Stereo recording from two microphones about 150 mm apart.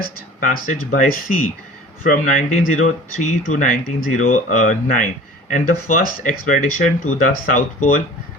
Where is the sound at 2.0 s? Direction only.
65° left (ahead or behind).